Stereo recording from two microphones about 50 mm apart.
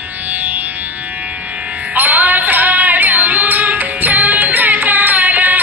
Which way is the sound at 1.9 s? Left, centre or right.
Right.